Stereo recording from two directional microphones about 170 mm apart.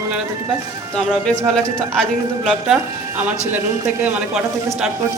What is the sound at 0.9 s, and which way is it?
Speech, 5° left (ahead or behind).